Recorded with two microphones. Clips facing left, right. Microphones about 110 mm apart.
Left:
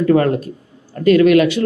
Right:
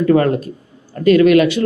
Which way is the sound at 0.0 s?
25° right (ahead or behind).